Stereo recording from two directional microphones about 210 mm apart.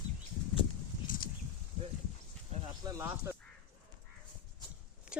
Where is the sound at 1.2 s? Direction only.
40° left (ahead or behind).